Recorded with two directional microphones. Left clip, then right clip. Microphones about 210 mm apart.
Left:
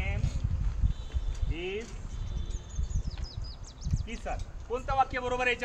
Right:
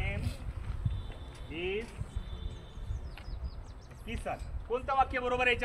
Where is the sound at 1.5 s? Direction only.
Centre (ahead or behind).